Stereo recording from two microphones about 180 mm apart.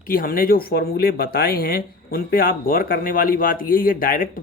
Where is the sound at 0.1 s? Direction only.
50° left (ahead or behind).